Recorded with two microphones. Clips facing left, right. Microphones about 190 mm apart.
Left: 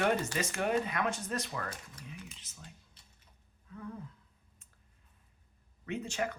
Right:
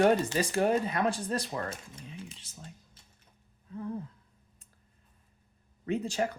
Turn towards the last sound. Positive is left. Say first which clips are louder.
# right 5 dB
turn(degrees=-35)  # may be behind; listen again after turning